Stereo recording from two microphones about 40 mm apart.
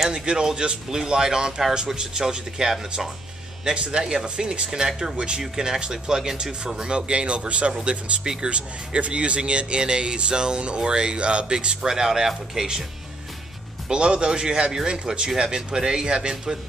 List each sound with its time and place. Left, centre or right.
0.0 s speech: centre
3.6 s speech: right
7.7 s speech: centre
8.5 s speech: right
13.8 s speech: right